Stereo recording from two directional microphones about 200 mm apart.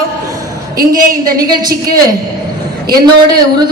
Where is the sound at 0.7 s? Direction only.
45° right (ahead or behind).